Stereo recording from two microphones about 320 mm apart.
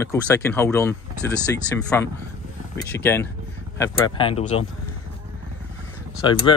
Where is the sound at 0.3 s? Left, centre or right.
Centre.